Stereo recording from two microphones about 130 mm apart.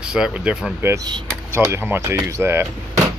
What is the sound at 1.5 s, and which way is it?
Speech, 20° right (ahead or behind).